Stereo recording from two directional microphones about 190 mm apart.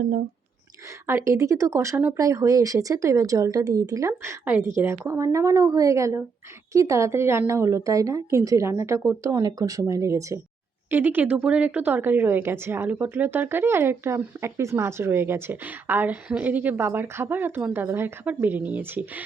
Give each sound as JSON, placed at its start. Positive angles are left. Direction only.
{"t": 1.0, "sound": "speech", "side_deg": -15}